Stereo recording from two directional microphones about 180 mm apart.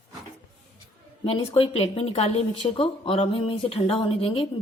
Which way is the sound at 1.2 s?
30° left (ahead or behind).